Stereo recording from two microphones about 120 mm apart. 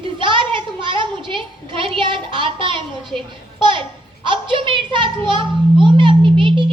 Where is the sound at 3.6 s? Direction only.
40° right (ahead or behind).